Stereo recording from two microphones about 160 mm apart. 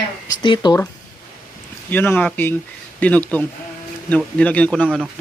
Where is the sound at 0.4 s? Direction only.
30° left (ahead or behind).